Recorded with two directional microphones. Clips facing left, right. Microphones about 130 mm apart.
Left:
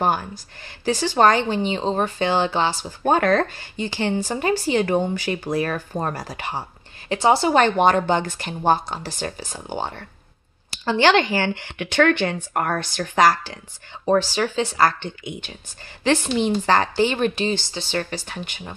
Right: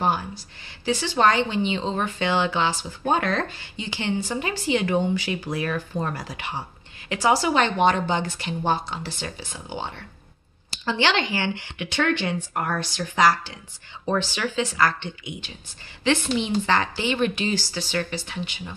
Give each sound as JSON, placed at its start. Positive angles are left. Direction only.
{"t": 0.8, "sound": "a woman's voice", "side_deg": 45}
{"t": 3.0, "sound": "speech", "side_deg": 50}
{"t": 7.1, "sound": "a woman's voice", "side_deg": 30}
{"t": 7.5, "sound": "speech", "side_deg": 45}
{"t": 14.0, "sound": "a woman's voice", "side_deg": 35}
{"t": 17.9, "sound": "speech", "side_deg": 40}